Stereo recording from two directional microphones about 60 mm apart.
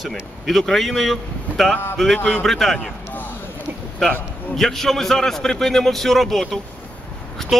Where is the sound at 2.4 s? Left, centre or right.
Centre.